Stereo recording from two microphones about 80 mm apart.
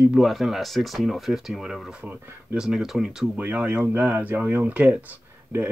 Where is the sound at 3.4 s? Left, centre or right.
Centre.